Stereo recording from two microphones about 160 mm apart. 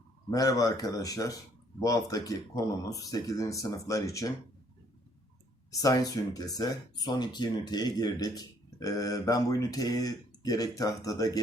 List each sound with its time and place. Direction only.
0.3 s speech: 20° left (ahead or behind)
5.8 s speech: 20° left (ahead or behind)